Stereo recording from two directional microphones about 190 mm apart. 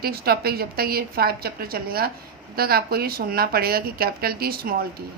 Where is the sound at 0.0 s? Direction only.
55° right (ahead or behind).